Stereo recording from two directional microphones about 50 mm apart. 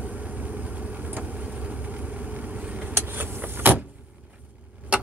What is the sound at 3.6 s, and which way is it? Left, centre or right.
Vehicle, right.